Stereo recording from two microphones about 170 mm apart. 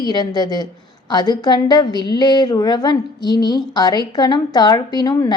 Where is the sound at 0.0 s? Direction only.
25° left (ahead or behind).